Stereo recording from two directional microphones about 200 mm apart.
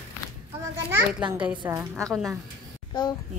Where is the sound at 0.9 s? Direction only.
10° right (ahead or behind).